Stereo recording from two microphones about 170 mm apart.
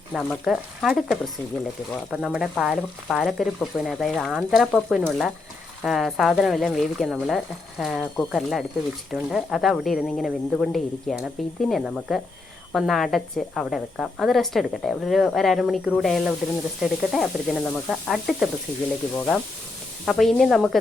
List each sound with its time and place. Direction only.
0.1 s speech: centre (ahead or behind)